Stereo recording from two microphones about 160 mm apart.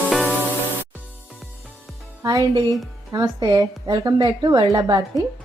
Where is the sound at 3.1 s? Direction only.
25° right (ahead or behind).